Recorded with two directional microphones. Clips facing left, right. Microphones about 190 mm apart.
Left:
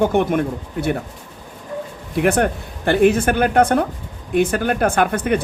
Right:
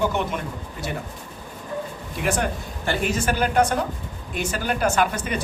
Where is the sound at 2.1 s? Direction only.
60° left (ahead or behind).